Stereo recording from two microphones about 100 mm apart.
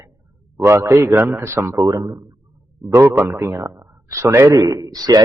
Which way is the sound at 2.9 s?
25° right (ahead or behind).